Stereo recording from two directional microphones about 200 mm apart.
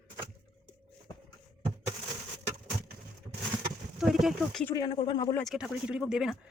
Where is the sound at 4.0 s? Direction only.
Centre (ahead or behind).